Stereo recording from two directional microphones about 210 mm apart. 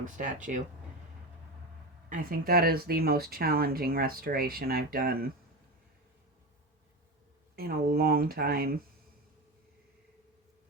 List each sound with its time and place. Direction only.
0.0 s speech: 40° right (ahead or behind)
2.0 s speech: 40° right (ahead or behind)
7.5 s speech: 45° right (ahead or behind)